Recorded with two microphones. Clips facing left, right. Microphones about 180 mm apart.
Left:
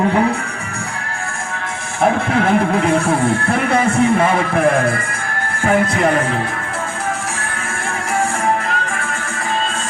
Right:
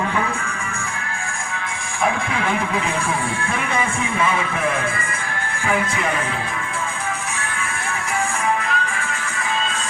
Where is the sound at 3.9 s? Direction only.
65° left (ahead or behind).